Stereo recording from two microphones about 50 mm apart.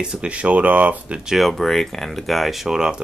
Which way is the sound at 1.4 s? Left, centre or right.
Centre.